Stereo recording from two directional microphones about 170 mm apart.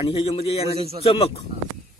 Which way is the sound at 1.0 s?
35° left (ahead or behind).